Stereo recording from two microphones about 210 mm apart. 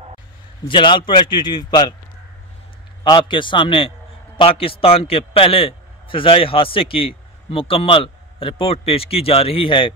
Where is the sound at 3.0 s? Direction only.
25° left (ahead or behind).